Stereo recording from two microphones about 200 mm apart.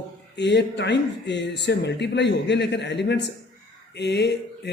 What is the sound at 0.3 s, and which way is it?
A man's voice, 60° left (ahead or behind).